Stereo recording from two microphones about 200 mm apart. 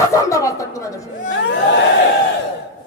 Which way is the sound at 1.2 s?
65° left (ahead or behind).